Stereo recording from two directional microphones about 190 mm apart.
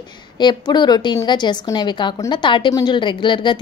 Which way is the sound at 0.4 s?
25° left (ahead or behind).